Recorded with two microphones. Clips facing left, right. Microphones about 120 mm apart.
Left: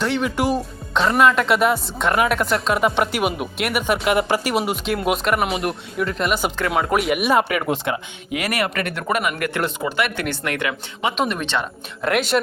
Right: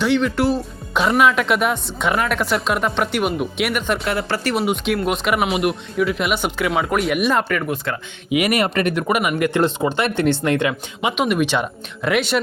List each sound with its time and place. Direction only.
0.0 s speech: 5° left (ahead or behind)
0.9 s speech: 5° right (ahead or behind)
4.1 s speech: 15° left (ahead or behind)
4.6 s speech: centre (ahead or behind); by 8.0 s 15° left (ahead or behind)
8.3 s speech: 15° right (ahead or behind)
11.1 s speech: 5° right (ahead or behind)